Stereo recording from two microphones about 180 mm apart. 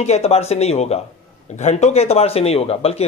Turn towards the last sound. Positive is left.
turn(degrees=35)  # may be behind; listen again after turning